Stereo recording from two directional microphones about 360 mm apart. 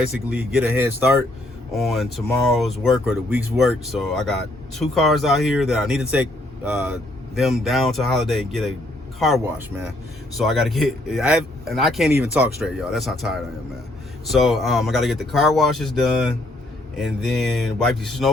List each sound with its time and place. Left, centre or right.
0.3 s speech: centre